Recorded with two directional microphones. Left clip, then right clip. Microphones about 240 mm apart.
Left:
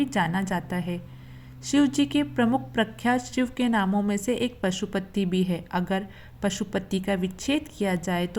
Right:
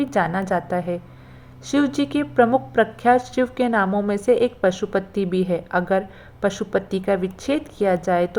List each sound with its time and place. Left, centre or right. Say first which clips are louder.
0.1 s a woman's voice: right 6 dB; left